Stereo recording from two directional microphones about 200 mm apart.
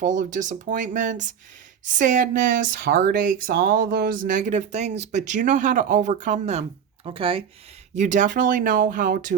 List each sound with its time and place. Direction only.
0.0 s speech: 40° right (ahead or behind)
7.9 s speech: 40° right (ahead or behind)